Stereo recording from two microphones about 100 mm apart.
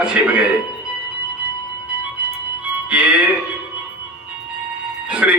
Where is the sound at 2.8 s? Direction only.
10° right (ahead or behind).